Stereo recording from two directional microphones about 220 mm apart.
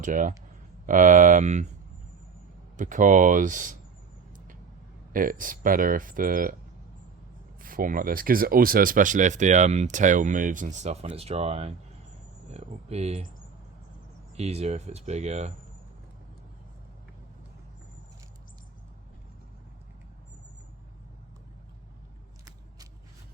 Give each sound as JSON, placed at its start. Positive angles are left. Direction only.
{"t": 0.0, "sound": "speech", "side_deg": -35}
{"t": 2.7, "sound": "speech", "side_deg": -35}
{"t": 5.1, "sound": "speech", "side_deg": -40}
{"t": 7.6, "sound": "speech", "side_deg": -40}
{"t": 14.3, "sound": "speech", "side_deg": -30}